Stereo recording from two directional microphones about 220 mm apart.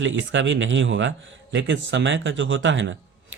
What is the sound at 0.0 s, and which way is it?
A man's voice, 55° right (ahead or behind).